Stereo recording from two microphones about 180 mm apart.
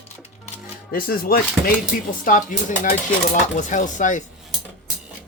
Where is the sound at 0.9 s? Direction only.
55° left (ahead or behind).